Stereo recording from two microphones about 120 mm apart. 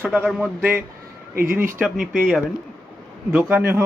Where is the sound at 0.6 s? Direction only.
20° right (ahead or behind).